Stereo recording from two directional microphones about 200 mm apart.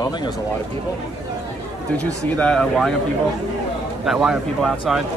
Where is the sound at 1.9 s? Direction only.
5° left (ahead or behind).